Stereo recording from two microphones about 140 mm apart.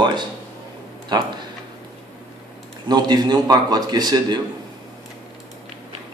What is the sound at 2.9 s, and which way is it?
A man's voice, 30° right (ahead or behind).